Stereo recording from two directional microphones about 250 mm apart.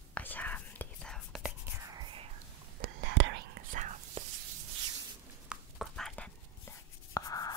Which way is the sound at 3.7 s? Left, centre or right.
Right.